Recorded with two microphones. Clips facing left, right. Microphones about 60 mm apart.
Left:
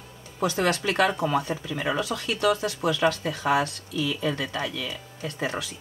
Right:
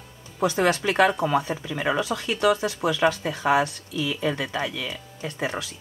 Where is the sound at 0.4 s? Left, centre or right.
Centre.